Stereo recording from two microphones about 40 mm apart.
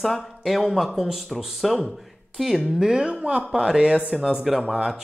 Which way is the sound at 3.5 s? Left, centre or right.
Centre.